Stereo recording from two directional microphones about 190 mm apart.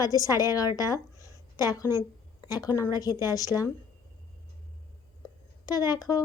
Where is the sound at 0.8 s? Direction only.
20° left (ahead or behind).